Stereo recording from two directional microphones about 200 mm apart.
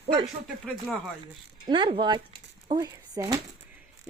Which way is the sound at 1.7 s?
20° right (ahead or behind).